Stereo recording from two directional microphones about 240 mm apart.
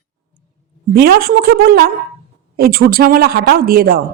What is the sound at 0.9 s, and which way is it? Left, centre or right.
Speech, right.